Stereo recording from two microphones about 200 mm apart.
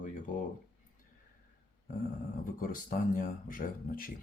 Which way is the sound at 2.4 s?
40° left (ahead or behind).